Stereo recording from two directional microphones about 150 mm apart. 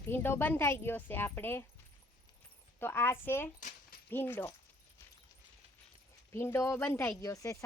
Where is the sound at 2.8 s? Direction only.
15° left (ahead or behind).